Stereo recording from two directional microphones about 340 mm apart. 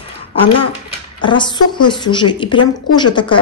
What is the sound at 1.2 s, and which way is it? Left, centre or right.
A woman's voice, centre.